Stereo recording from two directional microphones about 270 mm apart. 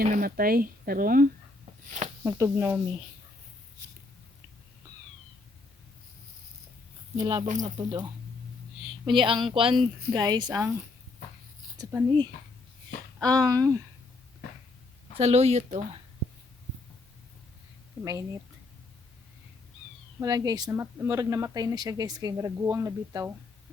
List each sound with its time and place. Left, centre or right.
0.0 s speech: right
2.2 s speech: centre
7.2 s speech: centre
11.8 s speech: centre
13.1 s speech: centre
13.4 s speech: centre
15.2 s speech: right
18.0 s speech: centre
20.1 s speech: centre